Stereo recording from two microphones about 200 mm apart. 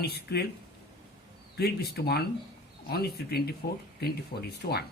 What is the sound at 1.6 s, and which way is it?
Speech, 50° left (ahead or behind).